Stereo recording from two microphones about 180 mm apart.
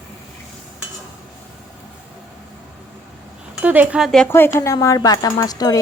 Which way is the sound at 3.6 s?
10° right (ahead or behind).